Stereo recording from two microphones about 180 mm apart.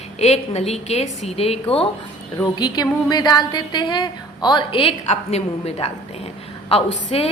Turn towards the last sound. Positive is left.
turn(degrees=35)  # may be behind; listen again after turning